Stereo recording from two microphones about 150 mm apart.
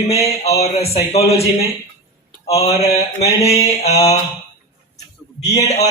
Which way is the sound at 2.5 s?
45° left (ahead or behind).